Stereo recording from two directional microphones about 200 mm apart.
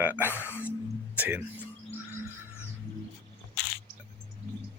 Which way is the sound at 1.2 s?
10° right (ahead or behind).